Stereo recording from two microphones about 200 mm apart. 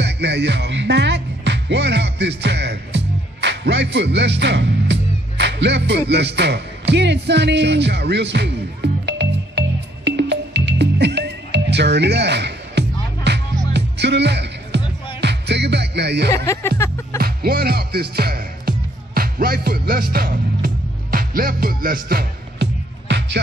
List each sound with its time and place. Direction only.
0.0 s music: 60° right (ahead or behind)
16.3 s music: 15° left (ahead or behind)
17.2 s music: 50° right (ahead or behind)